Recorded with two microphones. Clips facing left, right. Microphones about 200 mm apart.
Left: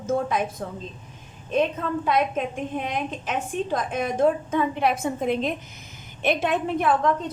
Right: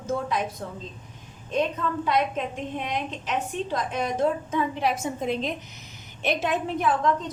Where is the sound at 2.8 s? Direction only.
50° left (ahead or behind).